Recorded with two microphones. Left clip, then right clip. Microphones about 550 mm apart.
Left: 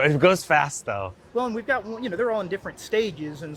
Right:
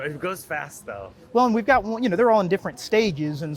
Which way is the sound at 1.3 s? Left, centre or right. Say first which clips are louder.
Right 7 dB; right.